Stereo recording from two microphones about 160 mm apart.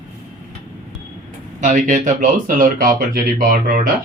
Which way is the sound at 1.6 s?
50° right (ahead or behind).